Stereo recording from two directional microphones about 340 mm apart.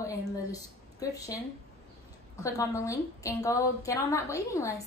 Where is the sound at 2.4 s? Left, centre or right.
Centre.